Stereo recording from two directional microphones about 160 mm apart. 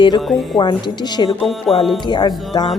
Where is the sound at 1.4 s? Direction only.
Centre (ahead or behind).